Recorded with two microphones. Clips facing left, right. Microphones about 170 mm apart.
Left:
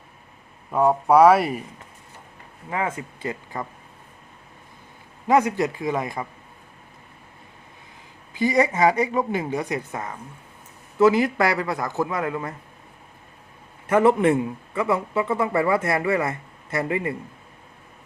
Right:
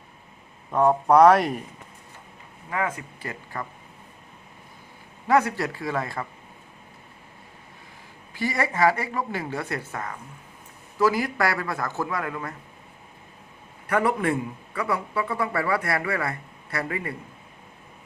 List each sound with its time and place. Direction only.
0.7 s speech: 5° left (ahead or behind)
2.6 s speech: 25° left (ahead or behind)
5.3 s speech: 20° left (ahead or behind)
8.3 s speech: 20° left (ahead or behind)
13.8 s speech: 25° left (ahead or behind)